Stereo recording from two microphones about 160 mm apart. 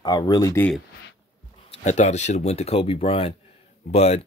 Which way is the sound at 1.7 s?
45° left (ahead or behind).